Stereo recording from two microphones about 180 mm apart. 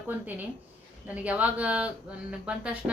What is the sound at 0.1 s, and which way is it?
Speech, 10° right (ahead or behind).